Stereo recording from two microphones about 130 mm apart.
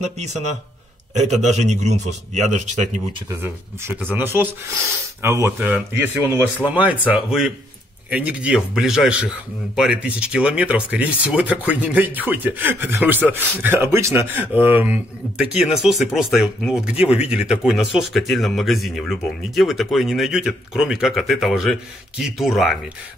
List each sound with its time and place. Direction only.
1.1 s a man's voice: 65° right (ahead or behind)
3.8 s speech: 15° right (ahead or behind)